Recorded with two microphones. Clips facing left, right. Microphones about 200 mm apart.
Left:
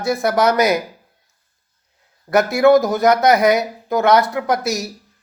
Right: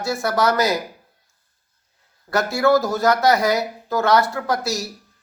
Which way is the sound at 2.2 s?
20° left (ahead or behind).